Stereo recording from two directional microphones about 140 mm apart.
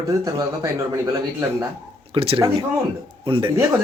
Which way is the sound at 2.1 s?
45° right (ahead or behind).